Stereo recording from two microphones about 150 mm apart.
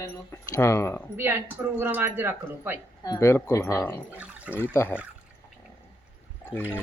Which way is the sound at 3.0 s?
20° left (ahead or behind).